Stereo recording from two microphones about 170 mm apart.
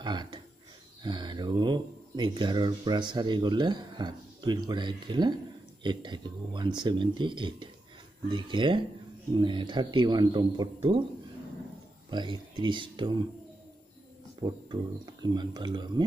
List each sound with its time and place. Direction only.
0.0 s speech: 25° right (ahead or behind)
12.1 s speech: 25° right (ahead or behind)
14.4 s speech: 25° right (ahead or behind)